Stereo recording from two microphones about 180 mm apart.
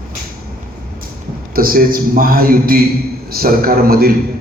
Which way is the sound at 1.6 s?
55° right (ahead or behind).